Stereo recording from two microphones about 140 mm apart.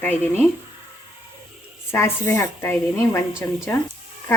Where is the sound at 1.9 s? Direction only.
20° left (ahead or behind).